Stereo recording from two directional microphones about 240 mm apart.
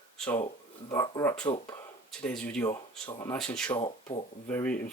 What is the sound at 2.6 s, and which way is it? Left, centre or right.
Speech, centre.